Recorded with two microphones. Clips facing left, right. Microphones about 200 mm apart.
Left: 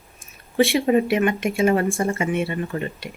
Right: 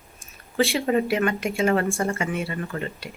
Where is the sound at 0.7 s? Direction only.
20° left (ahead or behind).